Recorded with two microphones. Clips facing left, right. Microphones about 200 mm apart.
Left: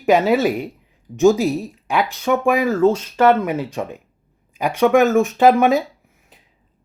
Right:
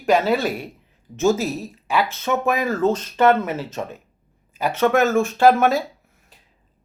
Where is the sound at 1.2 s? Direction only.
15° left (ahead or behind).